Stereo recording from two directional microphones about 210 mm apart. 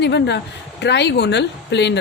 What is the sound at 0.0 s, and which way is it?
A woman's voice, 55° left (ahead or behind).